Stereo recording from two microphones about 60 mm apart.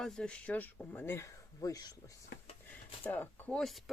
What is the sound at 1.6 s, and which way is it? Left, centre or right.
Speech, left.